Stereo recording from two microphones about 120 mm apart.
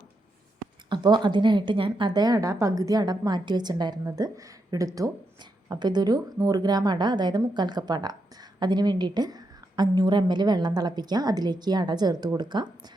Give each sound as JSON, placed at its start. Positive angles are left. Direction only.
{"t": 0.9, "sound": "a woman's voice", "side_deg": -40}